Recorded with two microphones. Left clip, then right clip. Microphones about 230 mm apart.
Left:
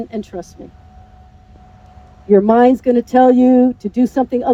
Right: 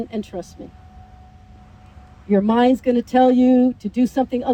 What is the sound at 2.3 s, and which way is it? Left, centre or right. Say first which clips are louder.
A woman's voice: left 7 dB; left.